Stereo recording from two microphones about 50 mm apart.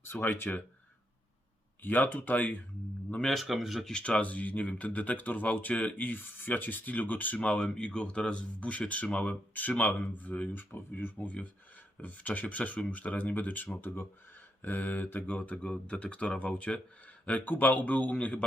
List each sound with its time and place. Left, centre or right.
0.0 s speech: left
1.8 s speech: left
3.2 s speech: centre
3.4 s speech: centre
3.9 s speech: left
7.3 s speech: left
10.5 s speech: left
15.5 s speech: centre
17.2 s speech: left